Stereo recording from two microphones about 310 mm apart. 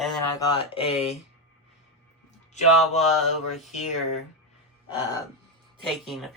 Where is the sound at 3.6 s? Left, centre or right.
Left.